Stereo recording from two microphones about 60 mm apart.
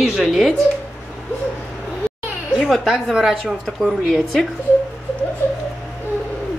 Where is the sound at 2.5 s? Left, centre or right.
Centre.